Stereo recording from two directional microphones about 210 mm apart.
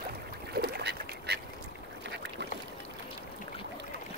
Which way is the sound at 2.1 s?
55° right (ahead or behind).